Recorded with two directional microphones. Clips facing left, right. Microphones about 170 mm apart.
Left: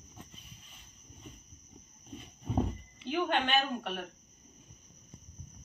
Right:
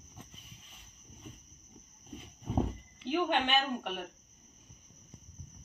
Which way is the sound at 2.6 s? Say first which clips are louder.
Even; 10° right (ahead or behind).